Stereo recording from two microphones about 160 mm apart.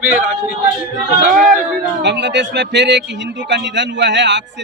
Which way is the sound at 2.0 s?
90° right.